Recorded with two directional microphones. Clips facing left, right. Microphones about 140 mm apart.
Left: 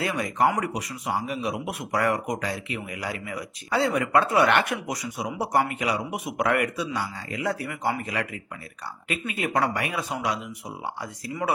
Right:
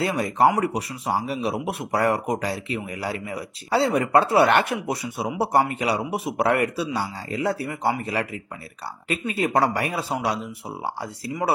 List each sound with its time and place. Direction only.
0.0 s speech: 35° right (ahead or behind)